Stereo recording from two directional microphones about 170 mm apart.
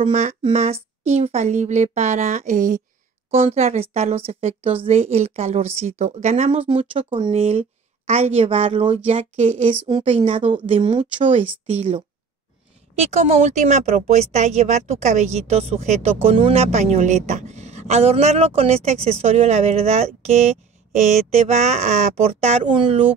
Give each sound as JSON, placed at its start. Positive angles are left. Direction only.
{"t": 0.0, "sound": "speech", "side_deg": -40}
{"t": 3.3, "sound": "speech", "side_deg": -40}